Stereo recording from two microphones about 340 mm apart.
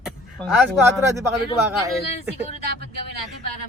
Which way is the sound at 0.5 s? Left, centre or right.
Centre.